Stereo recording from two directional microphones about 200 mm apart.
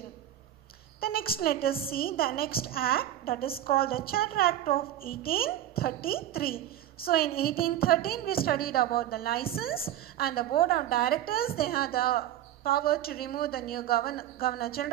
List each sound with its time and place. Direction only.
1.0 s a woman's voice: 50° left (ahead or behind)